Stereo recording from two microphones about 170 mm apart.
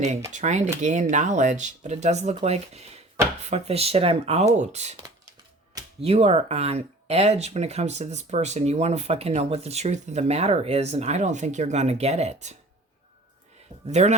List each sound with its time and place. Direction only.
0.3 s speech: 45° right (ahead or behind)
6.0 s speech: 35° right (ahead or behind)
13.8 s speech: 40° right (ahead or behind)